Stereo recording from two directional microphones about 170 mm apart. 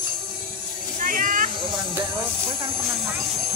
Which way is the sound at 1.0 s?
50° right (ahead or behind).